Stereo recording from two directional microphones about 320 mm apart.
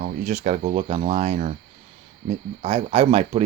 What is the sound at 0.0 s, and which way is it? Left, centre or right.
Speech, right.